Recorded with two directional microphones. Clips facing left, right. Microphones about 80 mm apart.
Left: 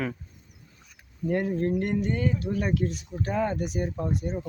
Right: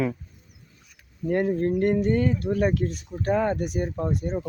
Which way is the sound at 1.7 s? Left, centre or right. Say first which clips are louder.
Right 5 dB; right.